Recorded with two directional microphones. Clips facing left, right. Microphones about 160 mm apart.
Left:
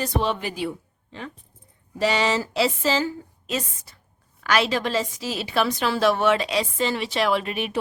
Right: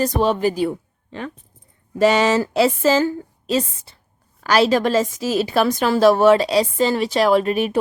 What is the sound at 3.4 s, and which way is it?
A woman's voice, 30° right (ahead or behind).